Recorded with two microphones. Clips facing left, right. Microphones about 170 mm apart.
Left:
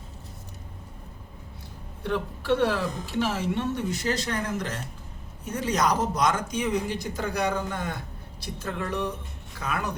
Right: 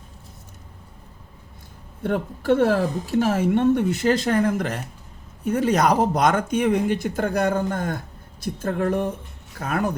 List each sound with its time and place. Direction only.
2.0 s speech: 50° right (ahead or behind)